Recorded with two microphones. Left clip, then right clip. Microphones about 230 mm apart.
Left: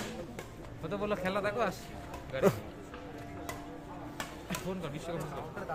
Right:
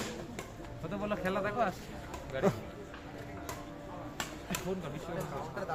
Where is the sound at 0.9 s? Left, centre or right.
Left.